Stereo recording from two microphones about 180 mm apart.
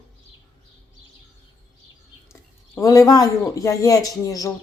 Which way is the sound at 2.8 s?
20° left (ahead or behind).